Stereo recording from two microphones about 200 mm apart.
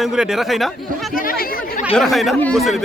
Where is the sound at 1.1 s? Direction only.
45° left (ahead or behind).